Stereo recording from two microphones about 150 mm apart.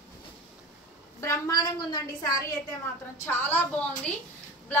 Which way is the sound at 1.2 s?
25° left (ahead or behind).